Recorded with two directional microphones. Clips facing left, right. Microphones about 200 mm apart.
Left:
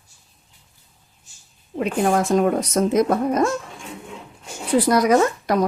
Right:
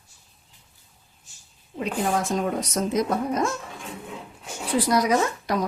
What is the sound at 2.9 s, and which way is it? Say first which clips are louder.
Speech: left 5 dB; 55° left (ahead or behind).